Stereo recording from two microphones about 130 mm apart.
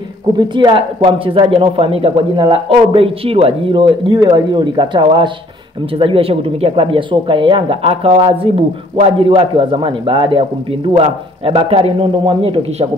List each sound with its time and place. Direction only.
0.4 s speech: 40° right (ahead or behind)